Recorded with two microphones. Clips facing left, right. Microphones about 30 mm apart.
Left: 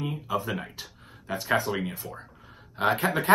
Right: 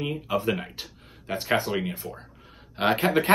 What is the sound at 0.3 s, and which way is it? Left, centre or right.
Speech, right.